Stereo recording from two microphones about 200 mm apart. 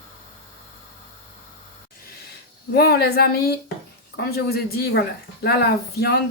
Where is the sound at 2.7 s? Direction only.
55° left (ahead or behind).